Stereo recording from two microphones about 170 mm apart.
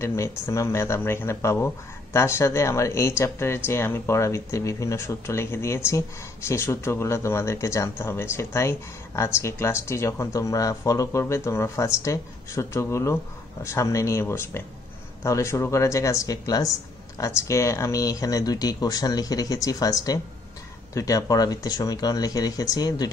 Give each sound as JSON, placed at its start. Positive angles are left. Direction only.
{"t": 0.0, "sound": "speech", "side_deg": 15}